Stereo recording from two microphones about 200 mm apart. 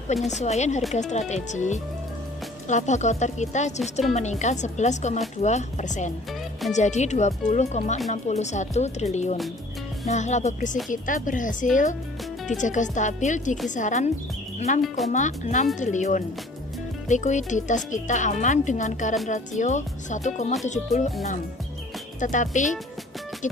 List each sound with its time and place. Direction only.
0.3 s speech: 35° left (ahead or behind)
14.8 s speech: centre (ahead or behind)
15.1 s speech: 40° left (ahead or behind)
22.2 s speech: 40° left (ahead or behind)